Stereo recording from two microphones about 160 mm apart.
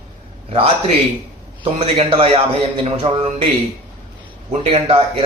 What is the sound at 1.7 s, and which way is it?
A man's voice, 40° right (ahead or behind).